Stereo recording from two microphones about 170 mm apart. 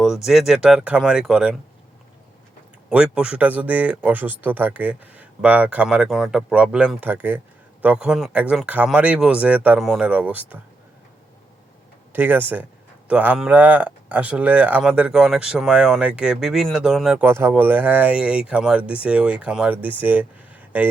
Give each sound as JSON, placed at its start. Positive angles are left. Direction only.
{"t": 0.0, "sound": "speech", "side_deg": 0}
{"t": 2.9, "sound": "speech", "side_deg": -5}
{"t": 12.1, "sound": "speech", "side_deg": -10}
{"t": 17.2, "sound": "speech", "side_deg": -15}